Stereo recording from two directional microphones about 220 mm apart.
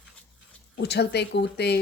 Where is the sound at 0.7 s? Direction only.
50° left (ahead or behind).